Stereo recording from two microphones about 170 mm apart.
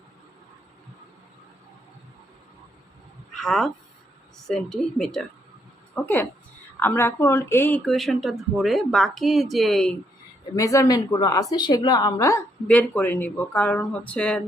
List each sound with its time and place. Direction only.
3.3 s a woman's voice: 5° left (ahead or behind)
7.8 s speech: centre (ahead or behind)
10.5 s a woman's voice: 20° left (ahead or behind)